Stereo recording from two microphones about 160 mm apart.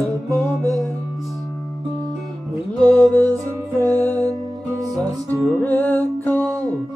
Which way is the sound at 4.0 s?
10° left (ahead or behind).